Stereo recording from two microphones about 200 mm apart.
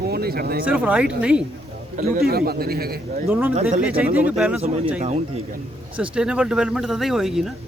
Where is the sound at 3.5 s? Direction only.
30° right (ahead or behind).